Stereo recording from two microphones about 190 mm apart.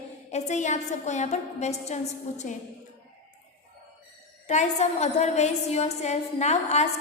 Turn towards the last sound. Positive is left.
turn(degrees=35)  # may be behind; listen again after turning